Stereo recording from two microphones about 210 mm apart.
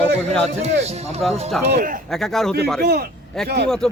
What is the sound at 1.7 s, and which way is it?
Speech, 45° right (ahead or behind).